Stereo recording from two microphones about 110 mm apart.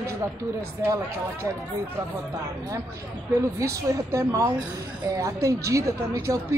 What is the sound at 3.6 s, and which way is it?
A woman's voice, 30° right (ahead or behind).